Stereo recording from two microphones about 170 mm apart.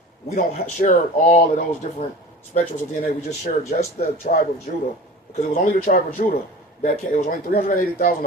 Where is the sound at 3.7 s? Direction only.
45° left (ahead or behind).